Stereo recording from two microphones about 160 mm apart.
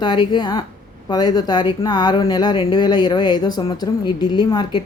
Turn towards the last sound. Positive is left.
turn(degrees=25)  # may be behind; listen again after turning